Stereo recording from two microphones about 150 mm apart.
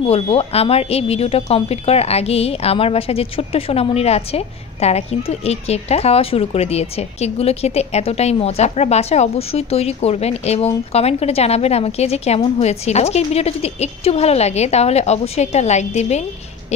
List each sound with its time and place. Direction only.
0.0 s speech: 40° left (ahead or behind)